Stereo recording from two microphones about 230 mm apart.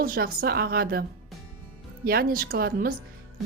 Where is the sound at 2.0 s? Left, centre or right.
Right.